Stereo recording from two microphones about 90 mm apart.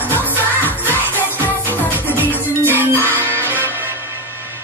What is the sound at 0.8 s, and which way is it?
Music, 20° left (ahead or behind).